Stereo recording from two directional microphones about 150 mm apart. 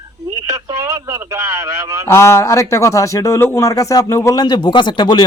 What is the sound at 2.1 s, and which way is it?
A man's voice, 15° left (ahead or behind).